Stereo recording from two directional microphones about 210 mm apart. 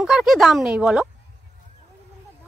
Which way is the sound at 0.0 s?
Centre (ahead or behind).